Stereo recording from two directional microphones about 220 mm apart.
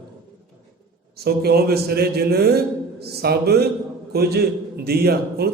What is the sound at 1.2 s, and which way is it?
A man's voice, 45° right (ahead or behind).